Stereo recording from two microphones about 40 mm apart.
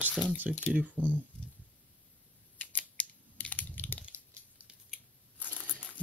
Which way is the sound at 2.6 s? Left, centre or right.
Left.